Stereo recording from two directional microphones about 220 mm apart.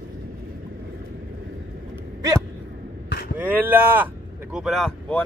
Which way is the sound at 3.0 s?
45° left (ahead or behind).